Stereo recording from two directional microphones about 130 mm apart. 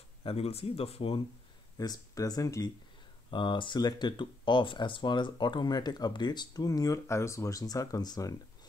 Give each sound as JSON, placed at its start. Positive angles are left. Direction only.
{"t": 0.2, "sound": "speech", "side_deg": 50}
{"t": 1.8, "sound": "speech", "side_deg": 30}
{"t": 3.3, "sound": "speech", "side_deg": 40}